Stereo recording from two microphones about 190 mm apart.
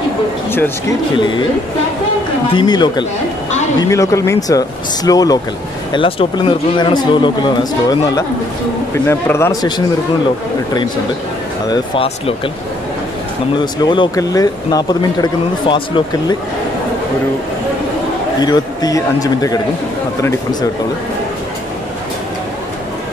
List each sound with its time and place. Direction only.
0.5 s speech: 10° left (ahead or behind)
2.5 s speech: 25° left (ahead or behind)
8.9 s speech: 15° left (ahead or behind)
11.7 s speech: 30° left (ahead or behind)
13.7 s speech: 25° left (ahead or behind)
18.4 s speech: 20° left (ahead or behind)